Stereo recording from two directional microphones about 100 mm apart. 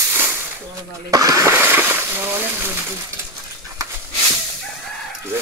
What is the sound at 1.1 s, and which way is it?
Speech, 35° right (ahead or behind).